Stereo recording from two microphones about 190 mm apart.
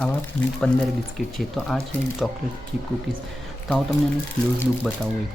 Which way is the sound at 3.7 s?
Centre (ahead or behind).